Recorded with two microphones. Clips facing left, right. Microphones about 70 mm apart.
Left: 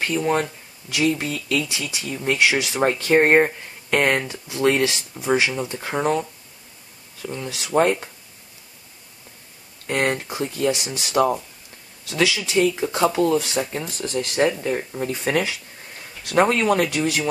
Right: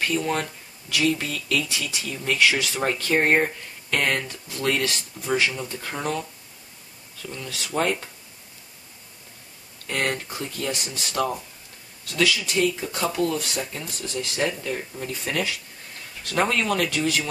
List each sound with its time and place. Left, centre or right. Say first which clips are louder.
0.0 s speech: left 3 dB; left
3.2 s speech: left 5 dB; left
4.2 s speech: left 7 dB; centre
5.8 s speech: left 8 dB; left
9.8 s speech: left 4 dB; centre
16.3 s speech: left 5 dB; left